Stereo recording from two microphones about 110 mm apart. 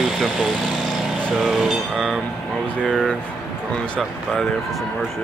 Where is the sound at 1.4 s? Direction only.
5° right (ahead or behind).